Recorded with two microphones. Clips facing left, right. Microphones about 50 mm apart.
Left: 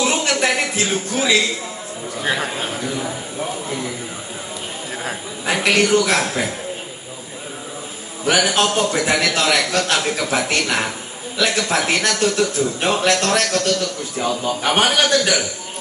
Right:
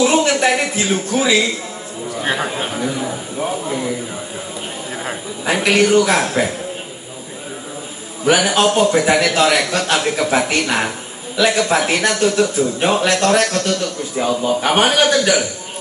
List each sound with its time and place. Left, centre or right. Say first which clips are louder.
0.0 s a man's voice: right 5 dB; centre
5.4 s a man's voice: right 2 dB; centre
5.9 s a man's voice: right 3 dB; centre
8.3 s a man's voice: right 3 dB; centre